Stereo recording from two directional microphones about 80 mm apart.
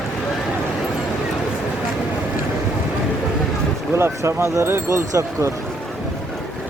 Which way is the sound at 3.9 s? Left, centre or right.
Right.